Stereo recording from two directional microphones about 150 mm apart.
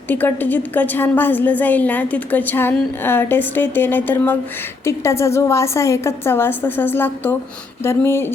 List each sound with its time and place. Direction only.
0.1 s a woman's voice: 15° left (ahead or behind)